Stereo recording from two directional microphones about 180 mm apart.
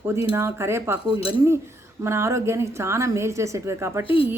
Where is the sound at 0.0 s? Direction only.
15° right (ahead or behind).